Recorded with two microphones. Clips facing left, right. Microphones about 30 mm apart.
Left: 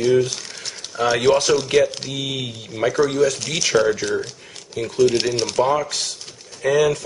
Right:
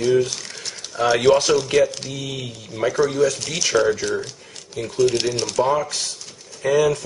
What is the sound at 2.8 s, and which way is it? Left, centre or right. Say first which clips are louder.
Speech: left 1 dB; centre.